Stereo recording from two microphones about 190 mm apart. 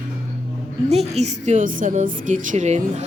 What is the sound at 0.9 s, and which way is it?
A woman's voice, 35° right (ahead or behind).